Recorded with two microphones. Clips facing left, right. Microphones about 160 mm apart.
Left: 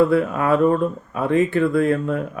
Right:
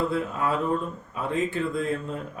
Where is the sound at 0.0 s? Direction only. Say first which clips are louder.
Left 9 dB; 65° left (ahead or behind).